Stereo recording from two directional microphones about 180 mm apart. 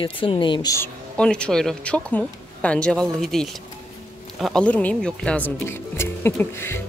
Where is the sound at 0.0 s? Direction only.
30° left (ahead or behind).